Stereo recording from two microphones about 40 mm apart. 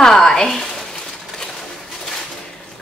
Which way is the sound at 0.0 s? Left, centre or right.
Centre.